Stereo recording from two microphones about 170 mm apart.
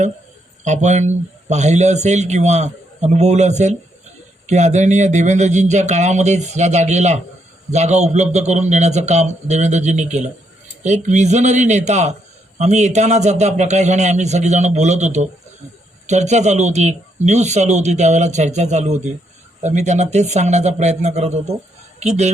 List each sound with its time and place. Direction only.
0.6 s a man's voice: 45° right (ahead or behind)